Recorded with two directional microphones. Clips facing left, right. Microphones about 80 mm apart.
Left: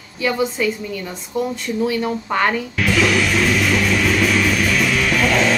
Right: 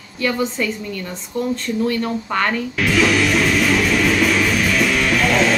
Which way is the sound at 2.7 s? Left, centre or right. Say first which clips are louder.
Right 3 dB; centre.